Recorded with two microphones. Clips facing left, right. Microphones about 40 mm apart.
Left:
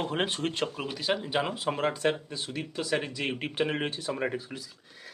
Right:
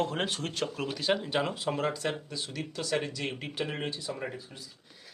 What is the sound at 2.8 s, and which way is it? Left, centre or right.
Speech, centre.